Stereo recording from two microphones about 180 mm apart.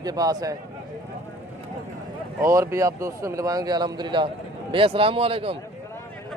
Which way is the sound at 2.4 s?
15° right (ahead or behind).